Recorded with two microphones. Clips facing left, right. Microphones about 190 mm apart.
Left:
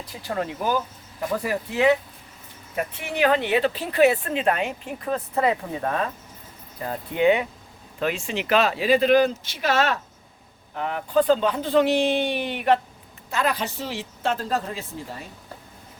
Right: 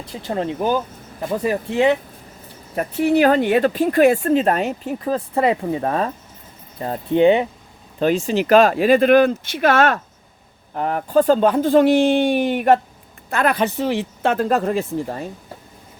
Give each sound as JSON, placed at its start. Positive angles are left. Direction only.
{"t": 0.1, "sound": "speech", "side_deg": -25}
{"t": 2.7, "sound": "speech", "side_deg": -35}
{"t": 13.3, "sound": "speech", "side_deg": -55}